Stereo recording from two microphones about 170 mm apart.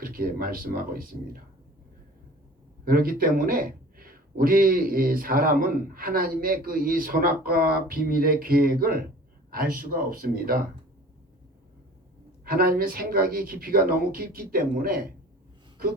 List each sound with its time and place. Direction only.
0.0 s speech: 60° right (ahead or behind)
2.8 s speech: 60° right (ahead or behind)
12.5 s speech: 60° right (ahead or behind)